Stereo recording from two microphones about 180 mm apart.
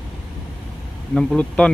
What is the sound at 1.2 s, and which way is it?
Speech, 5° left (ahead or behind).